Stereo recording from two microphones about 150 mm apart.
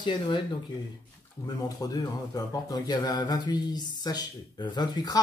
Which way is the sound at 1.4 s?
25° left (ahead or behind).